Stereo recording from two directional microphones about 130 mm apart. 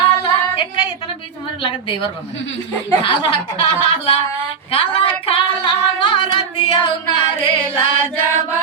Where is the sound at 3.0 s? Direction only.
45° left (ahead or behind).